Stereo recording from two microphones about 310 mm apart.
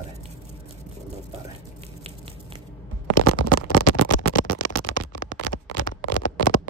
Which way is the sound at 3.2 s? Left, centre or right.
Left.